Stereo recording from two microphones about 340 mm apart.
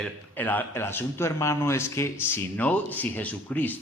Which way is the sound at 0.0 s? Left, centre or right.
Centre.